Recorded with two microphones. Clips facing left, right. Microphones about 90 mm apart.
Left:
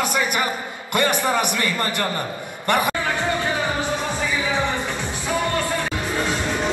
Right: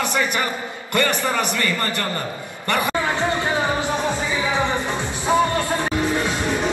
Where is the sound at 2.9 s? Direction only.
20° right (ahead or behind).